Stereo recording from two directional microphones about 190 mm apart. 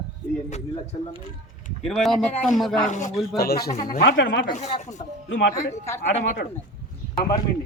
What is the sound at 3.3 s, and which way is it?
Speech, 55° left (ahead or behind).